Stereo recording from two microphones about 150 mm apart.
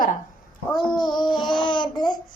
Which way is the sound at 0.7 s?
30° left (ahead or behind).